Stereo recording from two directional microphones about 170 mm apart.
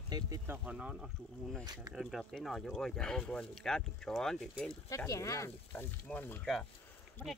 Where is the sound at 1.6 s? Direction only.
25° right (ahead or behind).